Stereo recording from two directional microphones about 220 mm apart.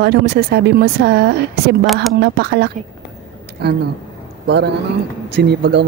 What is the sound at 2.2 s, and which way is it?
Speech, 50° right (ahead or behind).